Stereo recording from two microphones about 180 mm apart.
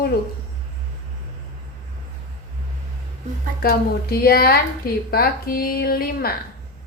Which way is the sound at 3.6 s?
55° left (ahead or behind).